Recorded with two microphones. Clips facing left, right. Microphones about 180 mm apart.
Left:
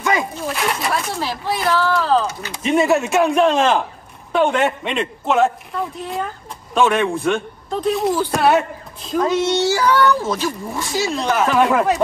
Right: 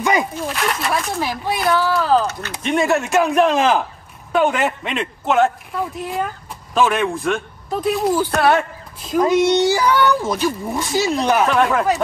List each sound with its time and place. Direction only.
0.5 s a man's voice: centre (ahead or behind)
1.2 s a man's voice: 10° right (ahead or behind)
9.1 s speech: 15° right (ahead or behind)
11.3 s a man's voice: centre (ahead or behind)